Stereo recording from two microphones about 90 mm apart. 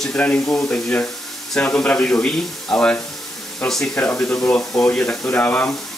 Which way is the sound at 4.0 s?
20° left (ahead or behind).